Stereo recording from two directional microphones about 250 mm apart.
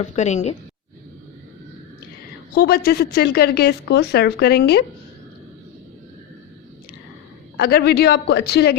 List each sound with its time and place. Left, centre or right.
0.0 s a woman's voice: left
2.6 s speech: left
7.5 s speech: left